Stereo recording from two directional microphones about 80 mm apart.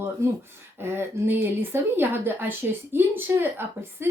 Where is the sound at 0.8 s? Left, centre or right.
Right.